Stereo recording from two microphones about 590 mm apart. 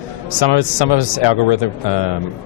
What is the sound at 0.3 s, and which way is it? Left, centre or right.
A man's voice, left.